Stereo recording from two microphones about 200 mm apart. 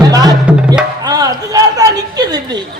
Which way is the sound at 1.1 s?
20° right (ahead or behind).